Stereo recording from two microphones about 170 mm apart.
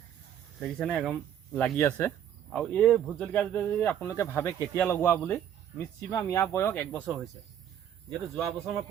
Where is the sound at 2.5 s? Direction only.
5° left (ahead or behind).